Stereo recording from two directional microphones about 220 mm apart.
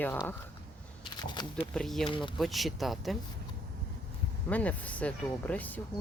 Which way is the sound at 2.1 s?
20° left (ahead or behind).